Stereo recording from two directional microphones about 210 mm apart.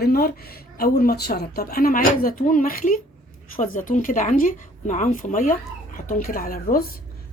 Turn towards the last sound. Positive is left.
turn(degrees=45)  # may be behind; listen again after turning